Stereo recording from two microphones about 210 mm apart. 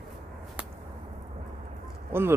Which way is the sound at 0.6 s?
5° right (ahead or behind).